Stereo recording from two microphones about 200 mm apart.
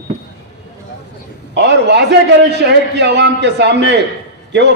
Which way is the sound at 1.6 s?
60° right (ahead or behind).